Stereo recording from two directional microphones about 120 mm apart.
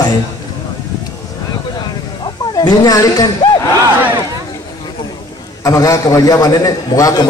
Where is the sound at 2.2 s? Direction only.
40° left (ahead or behind).